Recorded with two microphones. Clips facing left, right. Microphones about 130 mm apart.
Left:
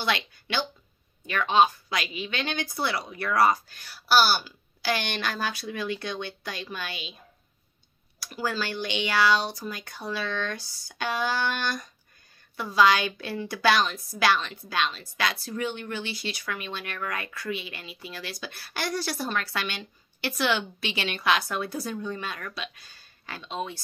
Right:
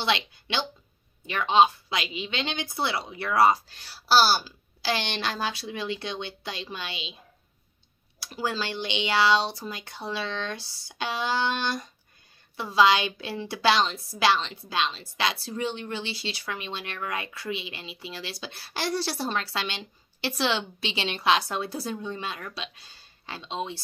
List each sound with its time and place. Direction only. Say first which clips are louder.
0.0 s a woman's voice: right 1 dB; 25° right (ahead or behind)
8.2 s a woman's voice: even; 25° right (ahead or behind)